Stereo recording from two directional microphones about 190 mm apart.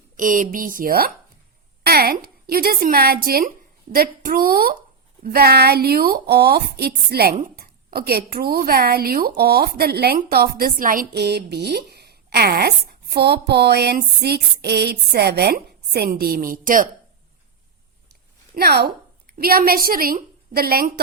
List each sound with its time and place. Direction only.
0.2 s a woman's voice: 45° right (ahead or behind)
18.5 s a woman's voice: 60° right (ahead or behind)